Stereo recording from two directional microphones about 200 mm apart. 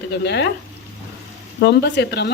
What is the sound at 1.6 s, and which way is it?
Speech, 60° left (ahead or behind).